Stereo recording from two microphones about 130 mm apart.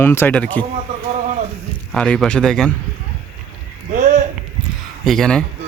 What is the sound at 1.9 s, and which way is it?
Speech, 5° left (ahead or behind).